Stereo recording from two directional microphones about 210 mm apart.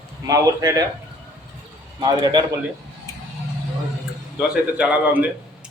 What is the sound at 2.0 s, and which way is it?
Speech, 20° right (ahead or behind).